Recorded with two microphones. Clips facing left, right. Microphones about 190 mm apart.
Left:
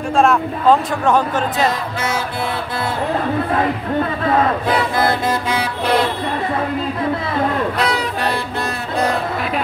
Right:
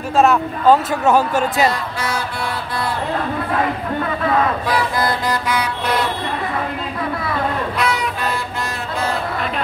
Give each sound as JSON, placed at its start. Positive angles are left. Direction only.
{"t": 0.1, "sound": "speech", "side_deg": -5}
{"t": 4.6, "sound": "vehicle", "side_deg": 25}
{"t": 7.8, "sound": "music", "side_deg": 35}